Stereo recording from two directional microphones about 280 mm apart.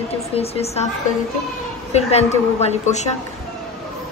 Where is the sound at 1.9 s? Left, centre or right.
Left.